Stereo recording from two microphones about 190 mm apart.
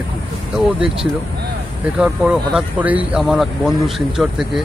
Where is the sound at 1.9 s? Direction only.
5° right (ahead or behind).